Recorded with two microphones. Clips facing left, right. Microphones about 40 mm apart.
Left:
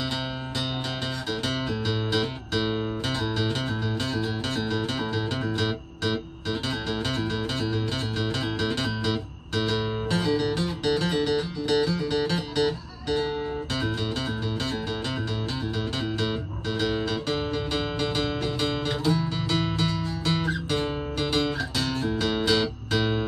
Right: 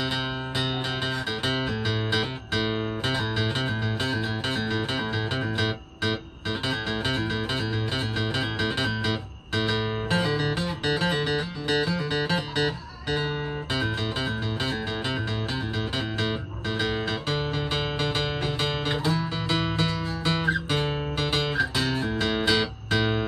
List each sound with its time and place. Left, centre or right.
2.1 s music: centre
8.5 s music: centre
18.0 s music: centre